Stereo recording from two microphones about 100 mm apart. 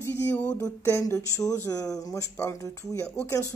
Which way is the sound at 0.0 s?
20° left (ahead or behind).